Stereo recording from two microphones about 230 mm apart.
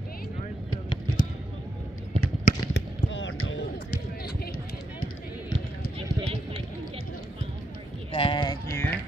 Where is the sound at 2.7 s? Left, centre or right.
Left.